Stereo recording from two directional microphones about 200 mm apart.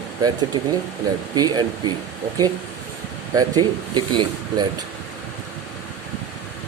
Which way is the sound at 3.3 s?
20° right (ahead or behind).